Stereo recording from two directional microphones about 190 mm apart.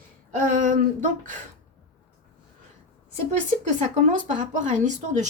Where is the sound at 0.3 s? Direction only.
45° right (ahead or behind).